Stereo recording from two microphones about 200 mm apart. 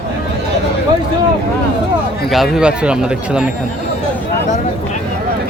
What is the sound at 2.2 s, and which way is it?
Speech, centre (ahead or behind).